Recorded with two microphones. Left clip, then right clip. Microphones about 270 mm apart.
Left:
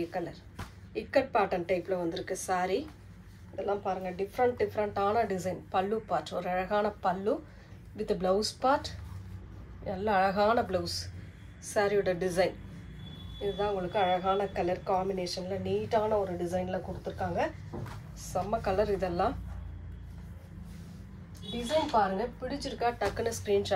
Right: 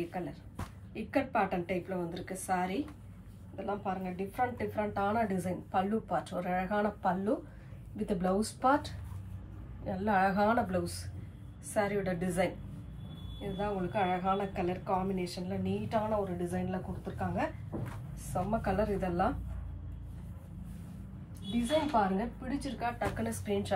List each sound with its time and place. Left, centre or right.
0.1 s speech: left
13.6 s speech: left
22.5 s speech: left